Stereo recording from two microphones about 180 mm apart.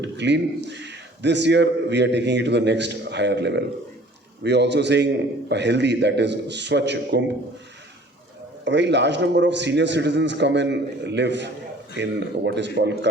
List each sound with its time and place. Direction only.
0.0 s a man's voice: 75° right (ahead or behind)
8.6 s a man's voice: 75° right (ahead or behind)